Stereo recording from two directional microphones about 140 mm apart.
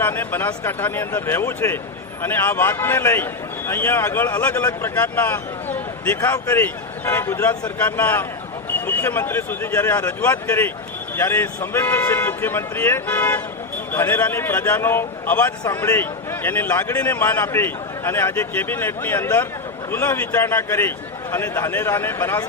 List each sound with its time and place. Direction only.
0.0 s a man's voice: 15° left (ahead or behind)